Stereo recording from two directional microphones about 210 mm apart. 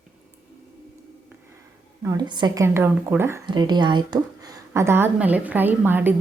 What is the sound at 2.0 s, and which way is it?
A woman's voice, 15° right (ahead or behind).